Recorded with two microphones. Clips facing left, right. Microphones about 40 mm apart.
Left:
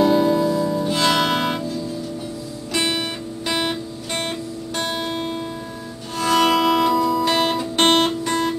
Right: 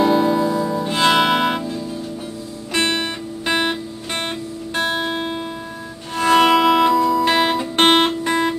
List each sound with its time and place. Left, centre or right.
0.0 s music: centre
0.8 s music: right
2.7 s guitar: centre
6.1 s music: right
6.4 s music: centre
7.2 s music: centre
7.7 s guitar: right